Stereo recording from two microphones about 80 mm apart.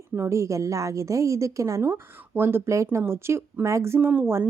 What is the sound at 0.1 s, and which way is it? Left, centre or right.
A woman's voice, right.